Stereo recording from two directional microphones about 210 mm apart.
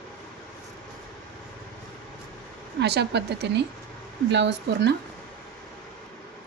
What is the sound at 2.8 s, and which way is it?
Speech, 50° right (ahead or behind).